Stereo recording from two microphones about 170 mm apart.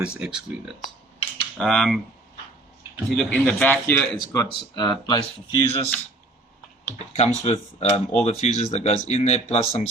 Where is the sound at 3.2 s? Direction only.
5° left (ahead or behind).